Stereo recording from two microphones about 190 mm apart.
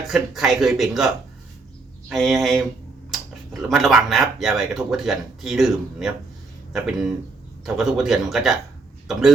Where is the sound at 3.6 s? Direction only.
Centre (ahead or behind).